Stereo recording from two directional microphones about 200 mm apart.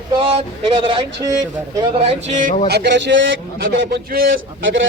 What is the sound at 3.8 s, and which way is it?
Speech, 50° right (ahead or behind).